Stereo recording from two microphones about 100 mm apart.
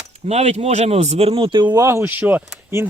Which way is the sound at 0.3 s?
90° right.